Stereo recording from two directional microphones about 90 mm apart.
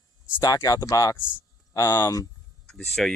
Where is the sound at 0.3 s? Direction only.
45° left (ahead or behind).